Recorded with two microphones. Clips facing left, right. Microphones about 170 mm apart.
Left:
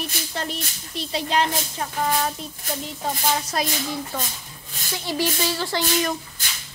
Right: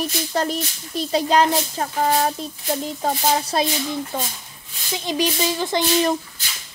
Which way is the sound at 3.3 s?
25° right (ahead or behind).